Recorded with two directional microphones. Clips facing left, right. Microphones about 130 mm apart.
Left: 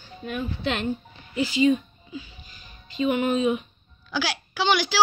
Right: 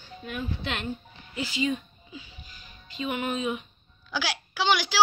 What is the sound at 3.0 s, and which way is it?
Speech, 30° left (ahead or behind).